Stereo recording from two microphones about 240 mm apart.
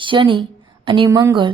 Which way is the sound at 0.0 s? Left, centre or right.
Centre.